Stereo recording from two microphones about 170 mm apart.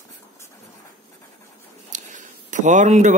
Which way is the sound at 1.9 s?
50° right (ahead or behind).